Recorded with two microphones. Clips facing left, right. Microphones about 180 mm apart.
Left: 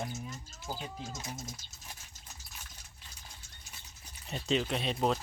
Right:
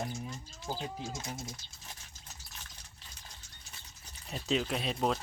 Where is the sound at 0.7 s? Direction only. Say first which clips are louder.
Right 2 dB; 10° right (ahead or behind).